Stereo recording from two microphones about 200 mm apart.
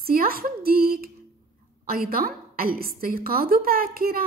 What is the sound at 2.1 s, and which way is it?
A woman's voice, 45° right (ahead or behind).